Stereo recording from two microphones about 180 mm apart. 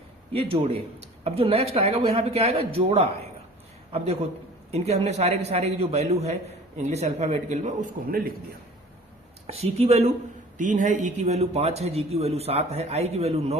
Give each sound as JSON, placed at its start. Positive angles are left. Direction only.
{"t": 0.3, "sound": "a man's voice", "side_deg": -30}
{"t": 9.5, "sound": "a man's voice", "side_deg": -35}